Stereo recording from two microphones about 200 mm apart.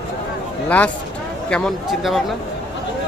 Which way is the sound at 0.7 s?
5° left (ahead or behind).